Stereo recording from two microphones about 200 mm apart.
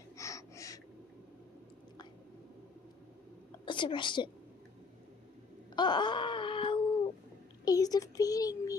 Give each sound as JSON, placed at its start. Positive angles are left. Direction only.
{"t": 0.2, "sound": "gasp", "side_deg": 15}
{"t": 3.6, "sound": "a woman's voice", "side_deg": 25}
{"t": 5.8, "sound": "wail", "side_deg": 20}
{"t": 7.6, "sound": "a sound", "side_deg": 20}